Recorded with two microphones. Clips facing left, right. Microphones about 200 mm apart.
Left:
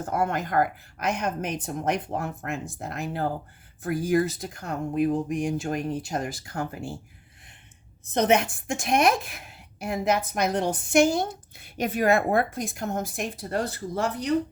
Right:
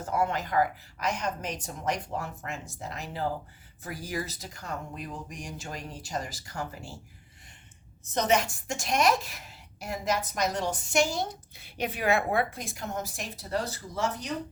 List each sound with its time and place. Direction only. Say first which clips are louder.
0.0 s a woman's voice: left 2 dB; 50° left (ahead or behind)
8.0 s a woman's voice: left 4 dB; 60° left (ahead or behind)